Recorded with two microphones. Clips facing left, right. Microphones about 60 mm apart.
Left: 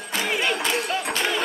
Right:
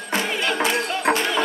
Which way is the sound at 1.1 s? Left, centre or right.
Right.